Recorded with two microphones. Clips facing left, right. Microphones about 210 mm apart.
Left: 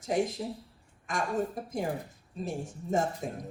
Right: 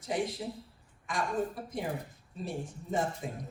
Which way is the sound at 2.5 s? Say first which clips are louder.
Left 3 dB; 45° left (ahead or behind).